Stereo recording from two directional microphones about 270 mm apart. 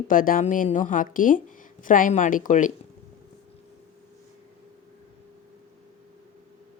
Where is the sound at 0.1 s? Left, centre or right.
Left.